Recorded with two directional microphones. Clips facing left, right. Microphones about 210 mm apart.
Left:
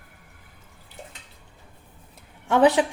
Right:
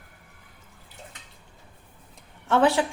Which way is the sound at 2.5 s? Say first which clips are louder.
Left 3 dB; 15° left (ahead or behind).